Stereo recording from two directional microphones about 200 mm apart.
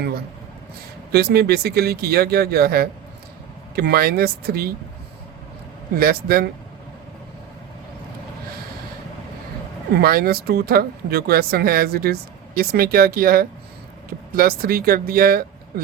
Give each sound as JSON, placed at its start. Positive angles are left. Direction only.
{"t": 1.1, "sound": "speech", "side_deg": -55}
{"t": 6.0, "sound": "speech", "side_deg": -50}
{"t": 9.9, "sound": "speech", "side_deg": -50}